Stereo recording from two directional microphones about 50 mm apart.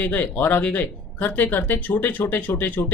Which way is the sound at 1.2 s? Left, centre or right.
Left.